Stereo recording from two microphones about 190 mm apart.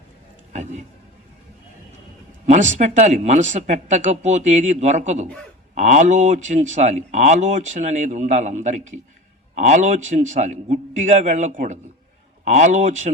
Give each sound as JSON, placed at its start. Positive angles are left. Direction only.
{"t": 0.5, "sound": "speech", "side_deg": -40}
{"t": 2.5, "sound": "speech", "side_deg": -40}